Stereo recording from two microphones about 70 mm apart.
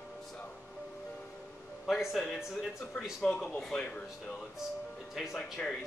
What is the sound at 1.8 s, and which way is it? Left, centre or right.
Speech, centre.